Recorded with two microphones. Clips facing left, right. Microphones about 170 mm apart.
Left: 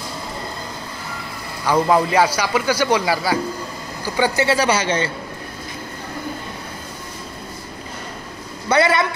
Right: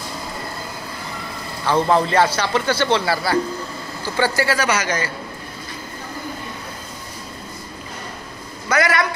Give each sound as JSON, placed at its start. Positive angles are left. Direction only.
{"t": 1.7, "sound": "a man's voice", "side_deg": 10}
{"t": 4.5, "sound": "a man's voice", "side_deg": 30}
{"t": 8.6, "sound": "speech", "side_deg": 25}